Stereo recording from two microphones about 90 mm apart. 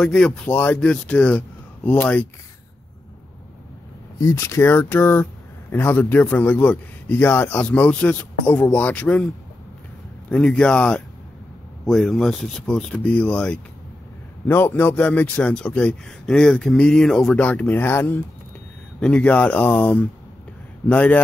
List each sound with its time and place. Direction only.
0.0 s a man's voice: 10° left (ahead or behind)
0.5 s a man's voice: 20° left (ahead or behind)
4.2 s speech: 35° left (ahead or behind); by 9.2 s 15° left (ahead or behind)
10.3 s a man's voice: 5° left (ahead or behind)
17.4 s speech: 15° left (ahead or behind)
18.9 s a man's voice: 10° left (ahead or behind)